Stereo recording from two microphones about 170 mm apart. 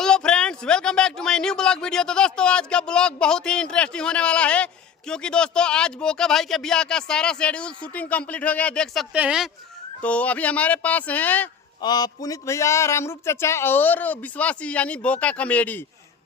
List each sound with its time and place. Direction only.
0.0 s speech: 5° left (ahead or behind)
10.0 s speech: 10° left (ahead or behind)
11.8 s speech: 25° left (ahead or behind)